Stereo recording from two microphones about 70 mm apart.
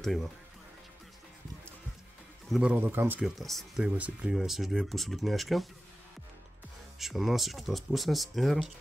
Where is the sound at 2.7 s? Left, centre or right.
Right.